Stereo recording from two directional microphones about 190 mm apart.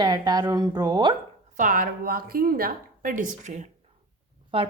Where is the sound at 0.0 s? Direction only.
20° right (ahead or behind).